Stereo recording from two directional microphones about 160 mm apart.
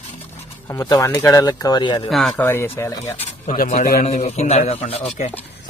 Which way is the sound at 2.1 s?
Centre (ahead or behind).